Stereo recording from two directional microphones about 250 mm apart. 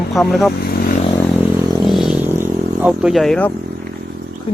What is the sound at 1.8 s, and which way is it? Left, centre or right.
Vehicle, centre.